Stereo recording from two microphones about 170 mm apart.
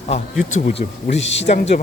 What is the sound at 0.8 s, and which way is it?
Speech, 45° left (ahead or behind).